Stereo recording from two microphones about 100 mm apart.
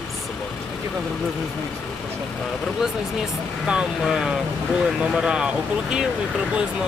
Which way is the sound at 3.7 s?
10° right (ahead or behind).